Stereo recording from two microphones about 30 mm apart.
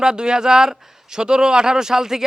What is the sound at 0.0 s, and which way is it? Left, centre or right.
Speech, right.